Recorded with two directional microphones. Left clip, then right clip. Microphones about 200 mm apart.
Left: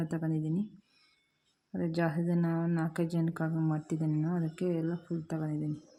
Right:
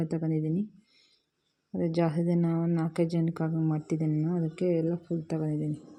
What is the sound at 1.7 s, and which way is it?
Speech, 10° right (ahead or behind).